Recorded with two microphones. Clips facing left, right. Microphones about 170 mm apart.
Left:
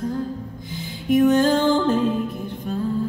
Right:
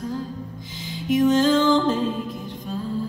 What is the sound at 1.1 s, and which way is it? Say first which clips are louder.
Music: left 2 dB; 55° left (ahead or behind).